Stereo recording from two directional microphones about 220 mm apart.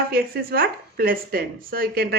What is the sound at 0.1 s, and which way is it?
Speech, 45° right (ahead or behind).